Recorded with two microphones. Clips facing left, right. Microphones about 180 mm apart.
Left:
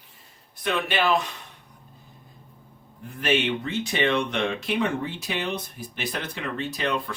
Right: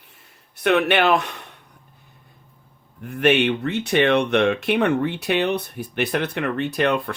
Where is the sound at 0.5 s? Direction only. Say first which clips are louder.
Right 8 dB; 65° right (ahead or behind).